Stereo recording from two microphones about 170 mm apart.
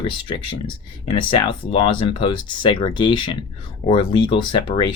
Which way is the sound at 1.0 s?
30° left (ahead or behind).